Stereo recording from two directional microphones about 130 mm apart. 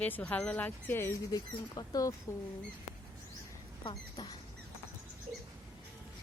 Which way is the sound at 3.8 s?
35° left (ahead or behind).